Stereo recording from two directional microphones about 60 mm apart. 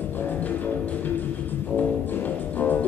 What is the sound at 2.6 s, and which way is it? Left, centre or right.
Music, left.